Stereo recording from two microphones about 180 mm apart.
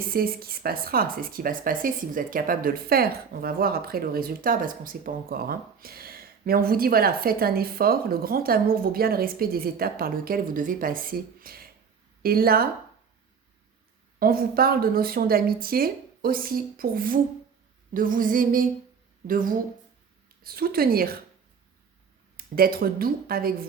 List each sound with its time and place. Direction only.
0.0 s speech: 55° right (ahead or behind)
14.2 s speech: 55° right (ahead or behind)
17.9 s female singing: 50° right (ahead or behind)
20.4 s speech: 55° right (ahead or behind)
22.4 s speech: 55° right (ahead or behind)